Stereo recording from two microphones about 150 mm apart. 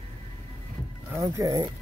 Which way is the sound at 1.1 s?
20° right (ahead or behind).